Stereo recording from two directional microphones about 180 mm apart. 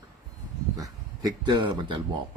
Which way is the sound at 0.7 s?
20° right (ahead or behind).